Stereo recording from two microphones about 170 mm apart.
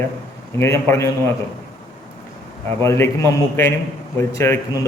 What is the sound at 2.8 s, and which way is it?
A man's voice, 15° left (ahead or behind).